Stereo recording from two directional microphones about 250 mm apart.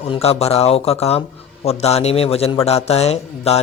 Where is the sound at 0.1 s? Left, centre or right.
Left.